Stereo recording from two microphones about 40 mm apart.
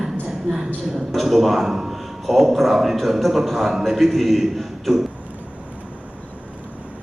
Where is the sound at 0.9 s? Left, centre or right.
Centre.